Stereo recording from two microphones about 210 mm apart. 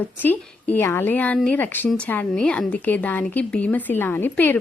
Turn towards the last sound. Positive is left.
turn(degrees=10)  # may be behind; listen again after turning